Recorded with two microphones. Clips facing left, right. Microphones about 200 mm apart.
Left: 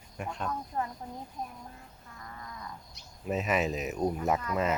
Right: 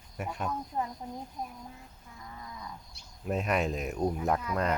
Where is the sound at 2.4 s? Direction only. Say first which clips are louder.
Even; 10° right (ahead or behind).